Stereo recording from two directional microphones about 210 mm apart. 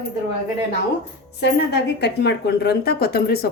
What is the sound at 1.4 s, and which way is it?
Speech, 55° left (ahead or behind).